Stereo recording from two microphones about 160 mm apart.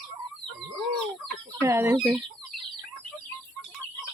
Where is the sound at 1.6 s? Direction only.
15° right (ahead or behind).